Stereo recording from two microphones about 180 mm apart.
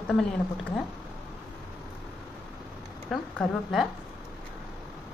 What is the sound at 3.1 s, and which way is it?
Speech, centre (ahead or behind).